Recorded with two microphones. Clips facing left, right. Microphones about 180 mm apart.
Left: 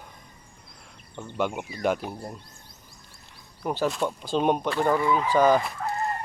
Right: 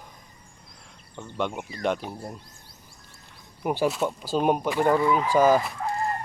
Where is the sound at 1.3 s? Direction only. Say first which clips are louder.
Left 1 dB; 5° left (ahead or behind).